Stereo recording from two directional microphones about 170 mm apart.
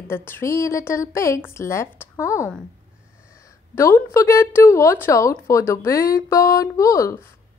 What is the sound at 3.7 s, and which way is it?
A woman's voice, 15° left (ahead or behind).